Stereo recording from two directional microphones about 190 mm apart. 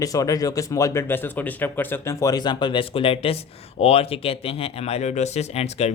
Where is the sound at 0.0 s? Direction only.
20° left (ahead or behind).